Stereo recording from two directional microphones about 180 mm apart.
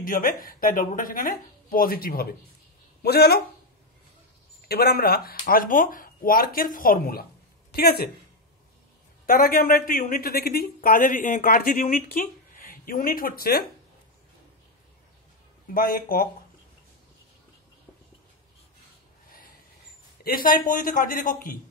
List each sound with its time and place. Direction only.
0.0 s speech: 50° left (ahead or behind)
4.6 s a woman's voice: 60° left (ahead or behind)
9.2 s speech: 55° left (ahead or behind)
15.7 s speech: 50° left (ahead or behind)
20.2 s speech: 55° left (ahead or behind)